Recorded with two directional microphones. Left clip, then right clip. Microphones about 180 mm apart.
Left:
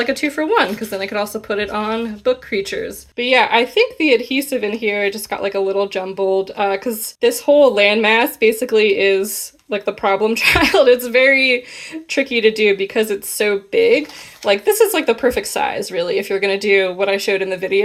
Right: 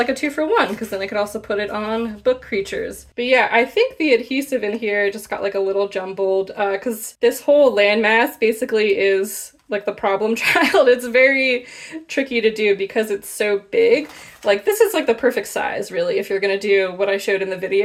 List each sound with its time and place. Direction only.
0.0 s speech: 25° left (ahead or behind)